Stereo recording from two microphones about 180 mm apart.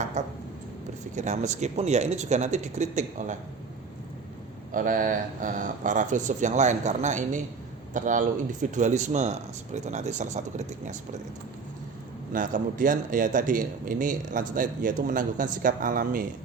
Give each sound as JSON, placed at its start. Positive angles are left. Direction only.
{"t": 0.2, "sound": "speech", "side_deg": -40}
{"t": 4.7, "sound": "a man's voice", "side_deg": -50}
{"t": 12.3, "sound": "a man's voice", "side_deg": -45}